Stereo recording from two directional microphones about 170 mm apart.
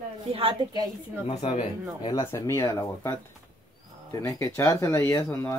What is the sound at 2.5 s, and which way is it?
Speech, 20° left (ahead or behind).